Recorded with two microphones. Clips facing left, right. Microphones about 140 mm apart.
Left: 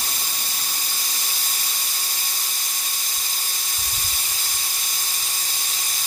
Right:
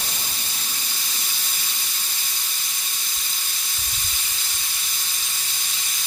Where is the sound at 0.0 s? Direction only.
40° left (ahead or behind).